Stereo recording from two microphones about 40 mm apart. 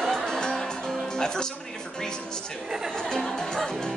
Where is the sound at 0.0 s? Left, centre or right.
Centre.